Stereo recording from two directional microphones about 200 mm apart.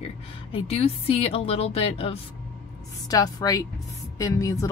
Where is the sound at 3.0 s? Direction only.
20° left (ahead or behind).